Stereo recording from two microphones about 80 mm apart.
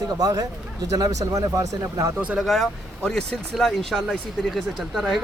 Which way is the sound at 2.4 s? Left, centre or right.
Centre.